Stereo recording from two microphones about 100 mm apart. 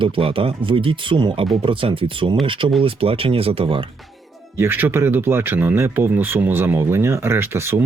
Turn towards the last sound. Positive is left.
turn(degrees=-25)  # may be behind; listen again after turning